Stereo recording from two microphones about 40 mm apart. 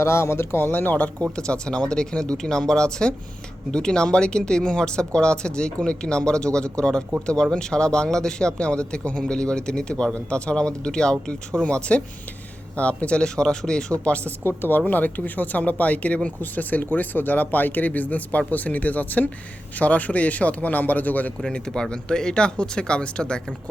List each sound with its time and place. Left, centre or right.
0.2 s speech: left
1.2 s a man's voice: left
13.9 s speech: left
14.4 s speech: left
16.4 s speech: left
21.8 s a man's voice: centre